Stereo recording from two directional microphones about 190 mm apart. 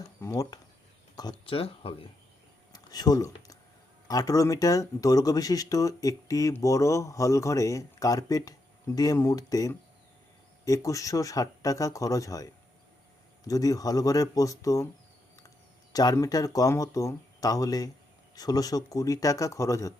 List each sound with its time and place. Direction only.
0.2 s speech: 15° left (ahead or behind)
2.7 s a sound: 20° left (ahead or behind)
4.1 s speech: 20° left (ahead or behind)
13.5 s speech: 20° left (ahead or behind)